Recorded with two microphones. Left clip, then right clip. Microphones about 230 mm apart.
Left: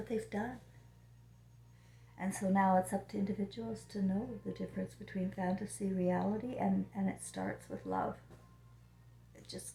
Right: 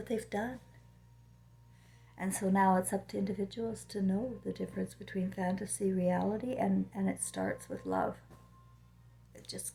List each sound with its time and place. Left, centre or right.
0.1 s speech: right
2.1 s speech: right
9.3 s a sound: right